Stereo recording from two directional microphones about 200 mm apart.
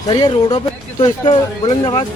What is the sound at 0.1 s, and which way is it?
Speech, 20° left (ahead or behind).